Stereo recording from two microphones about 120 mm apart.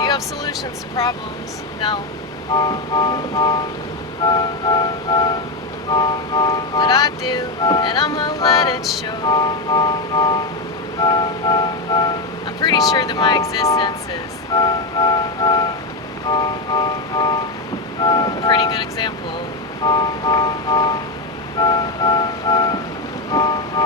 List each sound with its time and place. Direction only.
0.0 s vehicle: 35° left (ahead or behind)
2.6 s music: 35° left (ahead or behind)
23.3 s vehicle: 35° left (ahead or behind)